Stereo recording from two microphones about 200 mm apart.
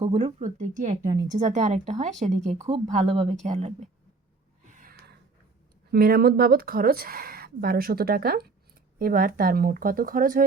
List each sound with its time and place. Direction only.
0.0 s speech: 30° right (ahead or behind)
1.0 s speech: 20° right (ahead or behind)
1.4 s speech: 35° right (ahead or behind)
2.6 s speech: 25° right (ahead or behind)
4.6 s gasp: 40° right (ahead or behind)
5.9 s speech: 50° right (ahead or behind)